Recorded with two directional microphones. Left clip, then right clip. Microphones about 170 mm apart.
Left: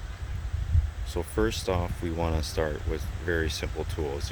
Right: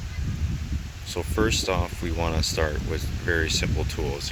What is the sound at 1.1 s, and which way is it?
Speech, 5° left (ahead or behind).